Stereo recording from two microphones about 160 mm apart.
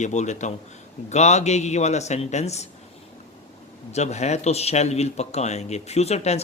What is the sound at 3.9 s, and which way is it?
Speech, 45° left (ahead or behind).